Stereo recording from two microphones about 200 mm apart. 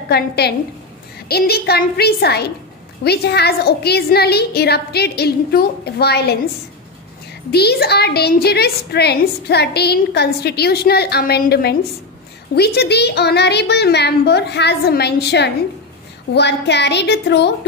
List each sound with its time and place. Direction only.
0.1 s a woman's voice: 50° left (ahead or behind)
7.5 s a woman's voice: 55° left (ahead or behind)